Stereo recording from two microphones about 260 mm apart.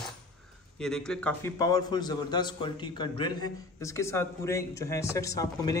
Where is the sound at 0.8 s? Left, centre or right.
Centre.